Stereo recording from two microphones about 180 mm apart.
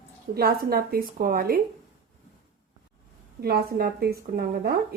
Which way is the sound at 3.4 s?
60° right (ahead or behind).